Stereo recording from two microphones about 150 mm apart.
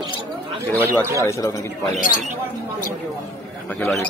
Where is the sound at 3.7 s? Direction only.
15° left (ahead or behind).